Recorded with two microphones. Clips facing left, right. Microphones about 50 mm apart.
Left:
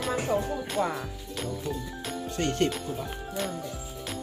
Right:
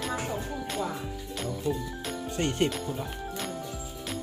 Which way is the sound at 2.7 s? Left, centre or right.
Centre.